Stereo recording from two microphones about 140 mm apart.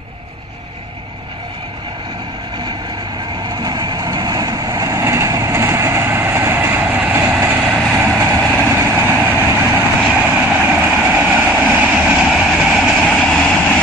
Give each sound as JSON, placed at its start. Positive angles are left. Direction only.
{"t": 3.4, "sound": "vehicle", "side_deg": -30}
{"t": 8.4, "sound": "vehicle", "side_deg": 0}
{"t": 8.7, "sound": "vehicle", "side_deg": -15}
{"t": 11.1, "sound": "train", "side_deg": -15}